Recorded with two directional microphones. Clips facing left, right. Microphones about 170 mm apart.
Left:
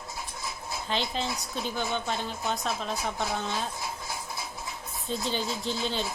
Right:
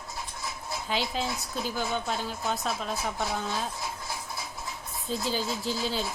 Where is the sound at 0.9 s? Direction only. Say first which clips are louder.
Even; 5° right (ahead or behind).